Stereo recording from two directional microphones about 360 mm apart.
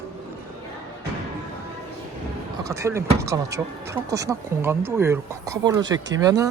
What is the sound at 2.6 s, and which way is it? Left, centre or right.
Speech, centre.